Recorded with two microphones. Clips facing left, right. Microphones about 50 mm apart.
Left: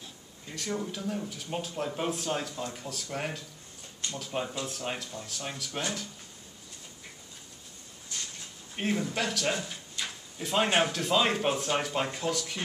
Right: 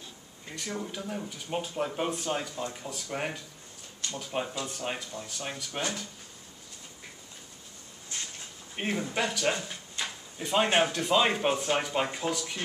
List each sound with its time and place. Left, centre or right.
0.0 s speech: centre
8.1 s a sound: right
8.7 s speech: centre